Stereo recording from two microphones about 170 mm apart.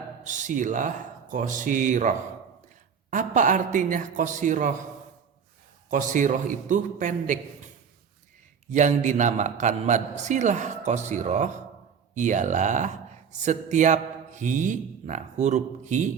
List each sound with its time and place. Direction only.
0.3 s a man's voice: 45° right (ahead or behind)
5.9 s a man's voice: 50° right (ahead or behind)
8.7 s a man's voice: 45° right (ahead or behind)